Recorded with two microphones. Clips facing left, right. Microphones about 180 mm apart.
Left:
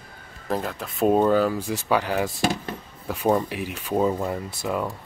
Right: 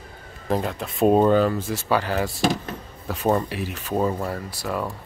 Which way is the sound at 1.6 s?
15° left (ahead or behind).